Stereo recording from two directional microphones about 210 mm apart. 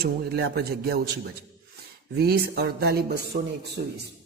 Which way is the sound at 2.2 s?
50° right (ahead or behind).